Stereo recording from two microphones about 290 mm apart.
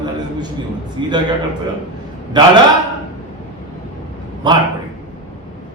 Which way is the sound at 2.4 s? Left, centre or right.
Centre.